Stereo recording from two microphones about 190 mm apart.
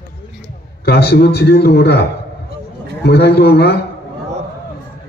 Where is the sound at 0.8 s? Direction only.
55° left (ahead or behind).